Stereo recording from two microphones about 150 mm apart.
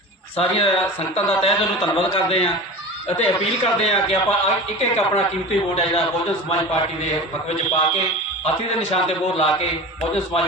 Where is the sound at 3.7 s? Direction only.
40° left (ahead or behind).